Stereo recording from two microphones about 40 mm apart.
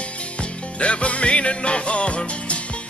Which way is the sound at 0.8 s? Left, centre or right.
Left.